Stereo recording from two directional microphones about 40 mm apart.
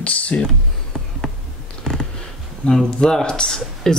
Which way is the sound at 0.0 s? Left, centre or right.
Left.